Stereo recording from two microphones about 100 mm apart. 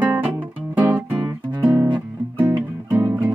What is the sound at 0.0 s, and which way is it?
Music, 15° right (ahead or behind).